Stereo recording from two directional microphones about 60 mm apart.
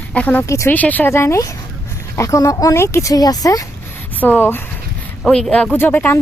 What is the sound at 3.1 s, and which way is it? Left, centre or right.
Speech, left.